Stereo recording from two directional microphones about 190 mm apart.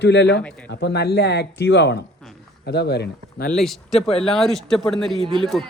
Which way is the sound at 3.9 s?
30° left (ahead or behind).